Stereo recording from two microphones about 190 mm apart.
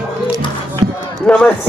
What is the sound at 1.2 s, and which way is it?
Speech, 5° left (ahead or behind).